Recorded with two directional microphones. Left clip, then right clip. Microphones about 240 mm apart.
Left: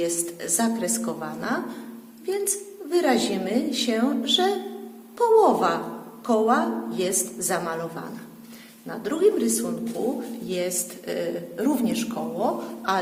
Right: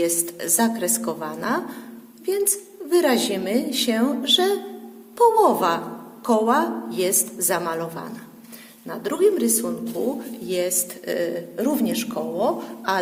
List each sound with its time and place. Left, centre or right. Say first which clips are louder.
0.0 s a woman's voice: right 3 dB; right
10.5 s speech: right 4 dB; right